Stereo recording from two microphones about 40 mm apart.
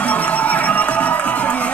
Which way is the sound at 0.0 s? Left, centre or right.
Left.